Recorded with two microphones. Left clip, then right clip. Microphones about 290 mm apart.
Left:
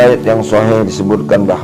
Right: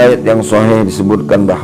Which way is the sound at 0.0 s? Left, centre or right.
Right.